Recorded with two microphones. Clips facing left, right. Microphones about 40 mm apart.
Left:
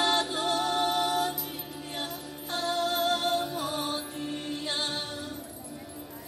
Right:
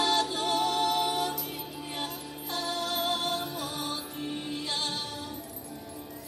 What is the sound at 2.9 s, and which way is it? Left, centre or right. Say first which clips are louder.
Music: left 1 dB; centre.